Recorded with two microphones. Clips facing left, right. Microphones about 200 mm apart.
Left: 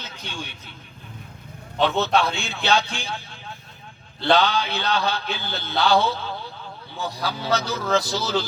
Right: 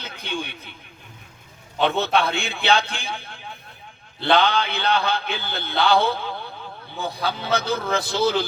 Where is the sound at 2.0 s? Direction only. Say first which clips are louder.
Even; 55° right (ahead or behind).